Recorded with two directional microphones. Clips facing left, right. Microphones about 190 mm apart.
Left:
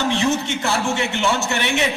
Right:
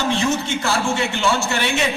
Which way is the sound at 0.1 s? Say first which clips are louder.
Even; 20° left (ahead or behind).